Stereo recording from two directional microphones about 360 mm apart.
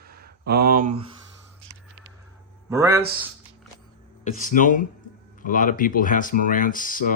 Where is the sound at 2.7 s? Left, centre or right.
Centre.